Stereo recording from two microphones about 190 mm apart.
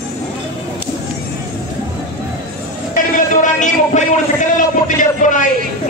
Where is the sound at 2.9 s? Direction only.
40° left (ahead or behind).